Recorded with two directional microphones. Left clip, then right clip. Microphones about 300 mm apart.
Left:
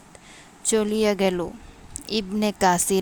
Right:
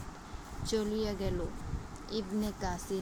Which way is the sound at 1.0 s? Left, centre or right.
Left.